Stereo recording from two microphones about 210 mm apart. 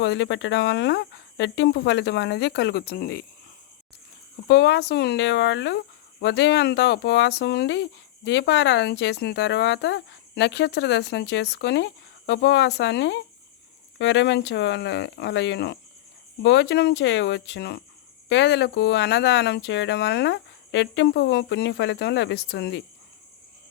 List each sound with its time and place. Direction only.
0.0 s speech: 55° left (ahead or behind)
4.4 s speech: 55° left (ahead or behind)